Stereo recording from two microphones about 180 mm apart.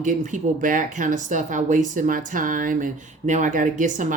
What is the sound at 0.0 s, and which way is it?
Speech, 45° right (ahead or behind).